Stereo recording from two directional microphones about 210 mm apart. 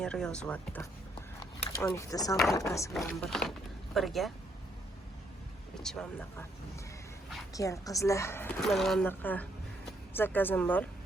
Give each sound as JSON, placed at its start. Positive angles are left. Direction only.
{"t": 0.0, "sound": "a woman's voice", "side_deg": 5}
{"t": 3.1, "sound": "speech", "side_deg": 0}
{"t": 5.8, "sound": "speech", "side_deg": 5}
{"t": 7.5, "sound": "a woman's voice", "side_deg": 15}